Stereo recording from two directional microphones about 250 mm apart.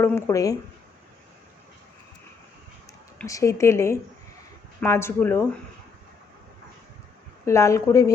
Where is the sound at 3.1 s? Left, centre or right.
Centre.